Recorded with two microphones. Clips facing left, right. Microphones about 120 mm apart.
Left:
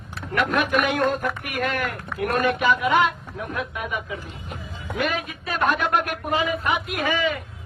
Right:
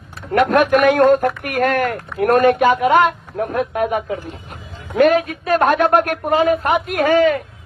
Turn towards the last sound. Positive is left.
turn(degrees=-50)  # may be behind; listen again after turning